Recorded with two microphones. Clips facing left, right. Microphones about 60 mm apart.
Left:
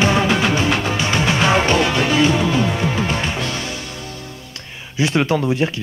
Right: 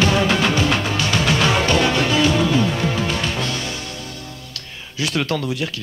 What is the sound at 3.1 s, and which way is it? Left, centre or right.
Music, left.